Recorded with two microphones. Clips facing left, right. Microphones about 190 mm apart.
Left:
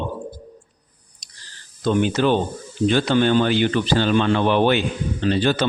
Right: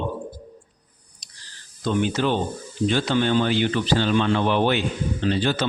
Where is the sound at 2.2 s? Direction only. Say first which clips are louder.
Left 4 dB; 60° left (ahead or behind).